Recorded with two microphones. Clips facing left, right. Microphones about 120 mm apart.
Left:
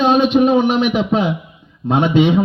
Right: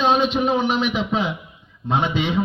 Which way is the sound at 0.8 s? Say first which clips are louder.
Left 6 dB; 50° left (ahead or behind).